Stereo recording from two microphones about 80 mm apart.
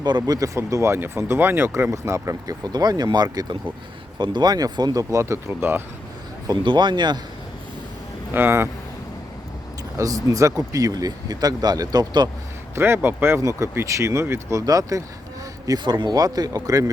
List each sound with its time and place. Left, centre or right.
0.2 s speech: right
1.9 s speech: right
2.7 s speech: right
5.1 s speech: right
6.5 s speech: right
8.3 s speech: right
10.0 s speech: right
12.7 s speech: right
13.4 s speech: right
14.6 s speech: right
15.8 s speech: right